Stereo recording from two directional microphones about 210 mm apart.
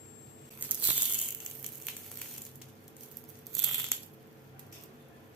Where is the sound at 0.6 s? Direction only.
5° right (ahead or behind).